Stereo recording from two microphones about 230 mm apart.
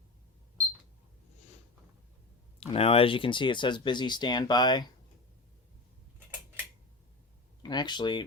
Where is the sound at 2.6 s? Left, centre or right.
Left.